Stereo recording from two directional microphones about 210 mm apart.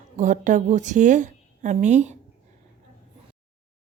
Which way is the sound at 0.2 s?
35° right (ahead or behind).